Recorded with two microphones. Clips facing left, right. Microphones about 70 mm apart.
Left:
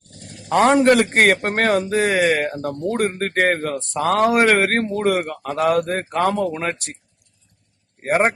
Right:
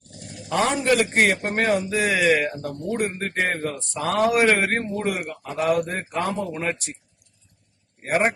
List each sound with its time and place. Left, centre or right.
0.4 s speech: left
8.0 s a man's voice: left